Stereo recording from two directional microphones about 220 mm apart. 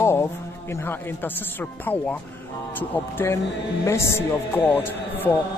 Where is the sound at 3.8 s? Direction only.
10° left (ahead or behind).